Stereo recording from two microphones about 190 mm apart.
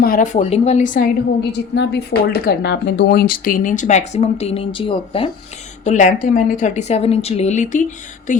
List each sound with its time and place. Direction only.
0.0 s speech: 45° left (ahead or behind)
1.7 s speech: 60° left (ahead or behind); by 5.3 s 30° left (ahead or behind)
5.8 s speech: 40° left (ahead or behind)